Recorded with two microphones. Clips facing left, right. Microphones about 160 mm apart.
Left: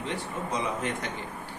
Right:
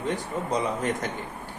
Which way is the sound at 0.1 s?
40° right (ahead or behind).